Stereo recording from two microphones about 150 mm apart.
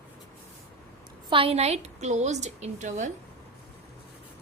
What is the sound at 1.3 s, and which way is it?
A woman's voice, 40° right (ahead or behind).